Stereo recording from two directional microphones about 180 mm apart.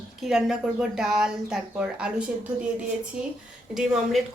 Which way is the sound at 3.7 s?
Centre (ahead or behind).